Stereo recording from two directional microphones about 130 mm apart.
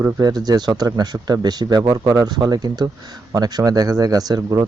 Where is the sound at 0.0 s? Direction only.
30° right (ahead or behind).